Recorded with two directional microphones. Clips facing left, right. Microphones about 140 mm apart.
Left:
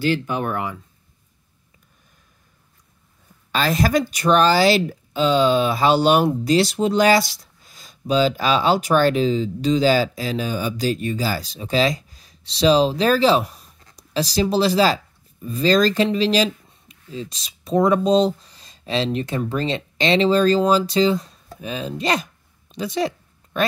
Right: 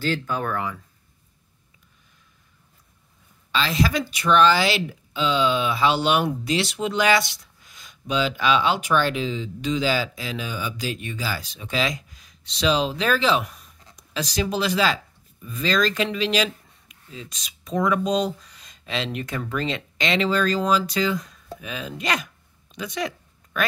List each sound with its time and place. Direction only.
0.0 s speech: 15° left (ahead or behind)
3.5 s a woman's voice: 45° left (ahead or behind); by 21.4 s 30° left (ahead or behind)
21.5 s a sound: 30° left (ahead or behind)